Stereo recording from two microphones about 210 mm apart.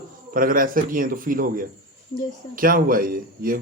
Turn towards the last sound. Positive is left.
turn(degrees=-45)  # may be behind; listen again after turning